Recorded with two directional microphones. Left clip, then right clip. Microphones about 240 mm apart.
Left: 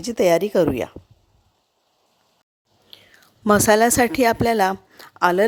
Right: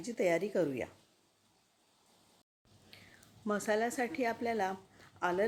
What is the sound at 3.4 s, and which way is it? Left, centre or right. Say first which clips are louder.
A woman's voice: left 18 dB; left.